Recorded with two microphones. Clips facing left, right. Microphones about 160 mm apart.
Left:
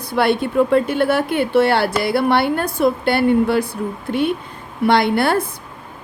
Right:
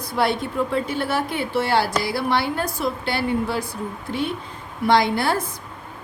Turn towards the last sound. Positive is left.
turn(degrees=60)  # may be behind; listen again after turning